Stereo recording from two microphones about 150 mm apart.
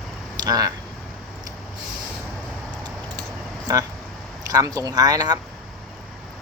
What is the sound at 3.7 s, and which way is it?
Speech, 25° right (ahead or behind).